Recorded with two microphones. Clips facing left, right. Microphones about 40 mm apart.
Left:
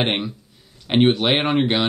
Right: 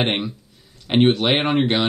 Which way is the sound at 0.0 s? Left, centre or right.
Centre.